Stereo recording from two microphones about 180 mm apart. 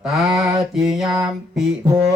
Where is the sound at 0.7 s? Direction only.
5° right (ahead or behind).